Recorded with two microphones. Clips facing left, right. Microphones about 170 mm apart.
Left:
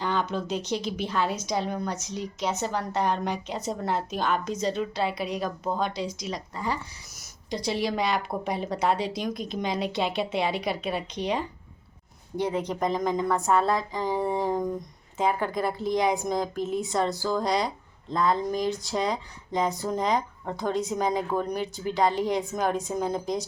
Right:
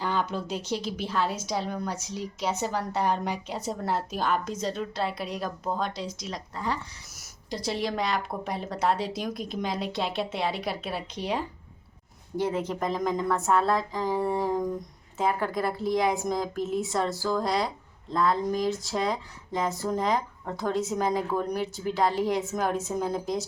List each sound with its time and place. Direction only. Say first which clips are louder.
0.0 s a woman's voice: left 1 dB; 5° right (ahead or behind)